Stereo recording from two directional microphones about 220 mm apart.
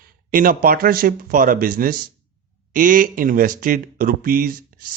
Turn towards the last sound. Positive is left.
turn(degrees=-40)  # may be behind; listen again after turning